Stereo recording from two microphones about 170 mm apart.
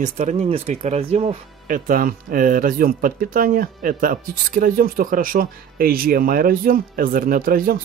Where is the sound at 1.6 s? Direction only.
55° right (ahead or behind).